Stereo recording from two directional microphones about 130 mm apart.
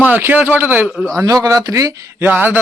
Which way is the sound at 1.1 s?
25° right (ahead or behind).